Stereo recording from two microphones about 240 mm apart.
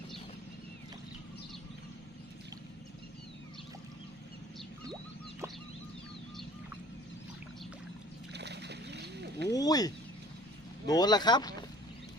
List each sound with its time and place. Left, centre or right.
8.3 s splash: right
9.5 s speech: centre